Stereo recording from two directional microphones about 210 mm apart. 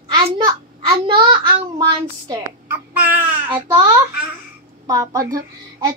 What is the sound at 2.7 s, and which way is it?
Babbling, 10° right (ahead or behind).